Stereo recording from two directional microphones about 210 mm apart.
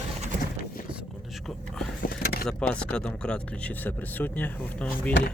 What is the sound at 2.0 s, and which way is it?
Vehicle, 45° left (ahead or behind).